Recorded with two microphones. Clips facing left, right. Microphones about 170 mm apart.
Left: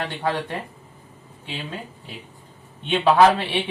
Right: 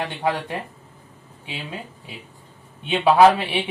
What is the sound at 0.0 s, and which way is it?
Speech, 15° right (ahead or behind).